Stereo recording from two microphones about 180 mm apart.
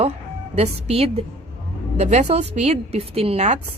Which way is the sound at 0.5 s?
35° right (ahead or behind).